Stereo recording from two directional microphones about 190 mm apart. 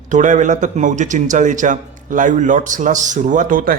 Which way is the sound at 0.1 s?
40° right (ahead or behind).